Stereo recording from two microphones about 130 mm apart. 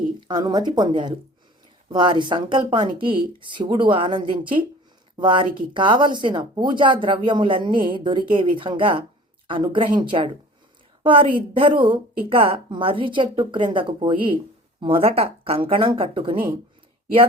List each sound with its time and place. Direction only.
0.3 s speech: 35° right (ahead or behind)